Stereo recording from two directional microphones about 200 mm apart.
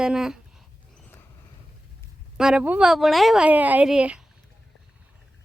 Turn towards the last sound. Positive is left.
turn(degrees=-5)  # may be behind; listen again after turning